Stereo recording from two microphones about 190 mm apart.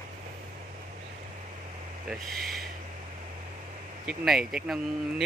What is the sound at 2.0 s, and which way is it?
Speech, centre (ahead or behind).